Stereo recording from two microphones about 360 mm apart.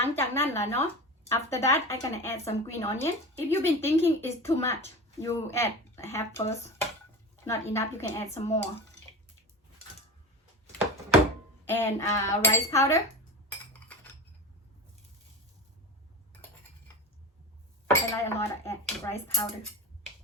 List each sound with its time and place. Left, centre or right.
0.0 s speech: centre
11.6 s speech: centre
13.7 s cutlery: centre
18.1 s speech: centre